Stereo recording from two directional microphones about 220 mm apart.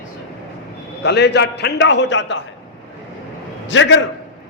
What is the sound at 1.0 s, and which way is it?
A man's voice, 50° left (ahead or behind).